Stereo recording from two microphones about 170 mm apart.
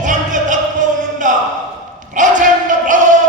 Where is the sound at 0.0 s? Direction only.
50° right (ahead or behind).